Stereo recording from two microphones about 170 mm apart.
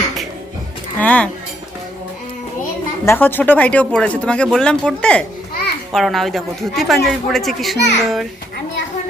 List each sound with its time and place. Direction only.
0.9 s speech: 10° left (ahead or behind)
3.1 s a child's voice: 10° left (ahead or behind)